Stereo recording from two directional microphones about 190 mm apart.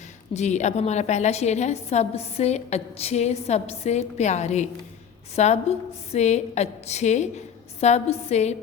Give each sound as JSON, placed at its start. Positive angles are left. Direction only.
{"t": 0.3, "sound": "a woman's voice", "side_deg": 40}